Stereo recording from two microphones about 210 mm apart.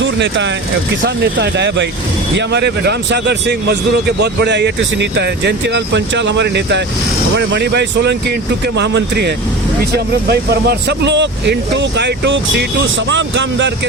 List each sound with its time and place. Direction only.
0.0 s speech: 60° right (ahead or behind)